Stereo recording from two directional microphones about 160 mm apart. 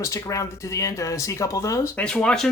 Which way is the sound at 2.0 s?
5° left (ahead or behind).